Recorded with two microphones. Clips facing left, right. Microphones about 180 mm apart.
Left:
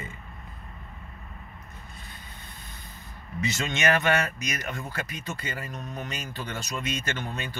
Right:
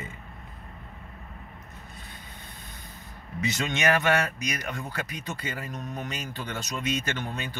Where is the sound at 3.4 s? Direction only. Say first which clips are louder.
Even; 15° right (ahead or behind).